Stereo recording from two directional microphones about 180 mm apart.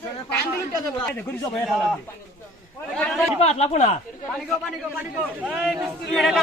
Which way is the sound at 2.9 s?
5° left (ahead or behind).